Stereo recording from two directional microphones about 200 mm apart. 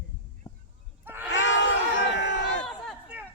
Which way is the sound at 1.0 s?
10° right (ahead or behind).